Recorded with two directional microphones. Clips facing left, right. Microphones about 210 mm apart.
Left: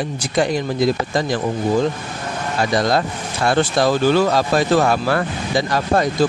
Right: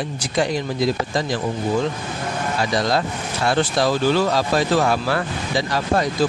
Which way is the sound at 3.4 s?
50° left (ahead or behind).